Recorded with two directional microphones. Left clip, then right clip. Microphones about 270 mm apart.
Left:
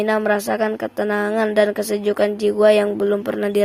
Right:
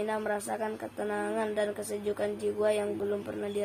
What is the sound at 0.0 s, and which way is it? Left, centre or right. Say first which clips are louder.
Speech: left 13 dB; left.